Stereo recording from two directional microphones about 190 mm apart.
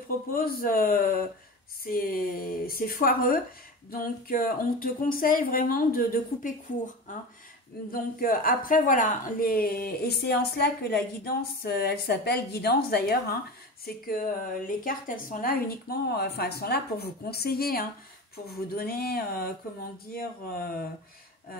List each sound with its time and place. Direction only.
0.3 s a woman's voice: 50° left (ahead or behind)